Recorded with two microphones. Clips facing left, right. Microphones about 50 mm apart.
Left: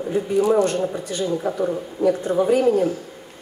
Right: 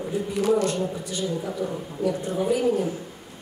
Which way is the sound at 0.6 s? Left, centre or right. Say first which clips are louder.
Left 4 dB; left.